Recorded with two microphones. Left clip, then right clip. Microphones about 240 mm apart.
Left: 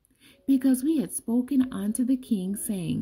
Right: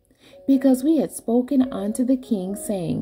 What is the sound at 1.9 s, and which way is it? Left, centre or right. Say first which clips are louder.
Speech: right 5 dB; left.